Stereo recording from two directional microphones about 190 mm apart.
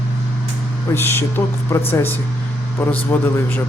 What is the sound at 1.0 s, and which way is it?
A man's voice, 10° left (ahead or behind).